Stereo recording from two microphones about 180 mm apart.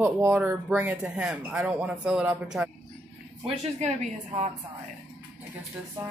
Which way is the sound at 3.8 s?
40° right (ahead or behind).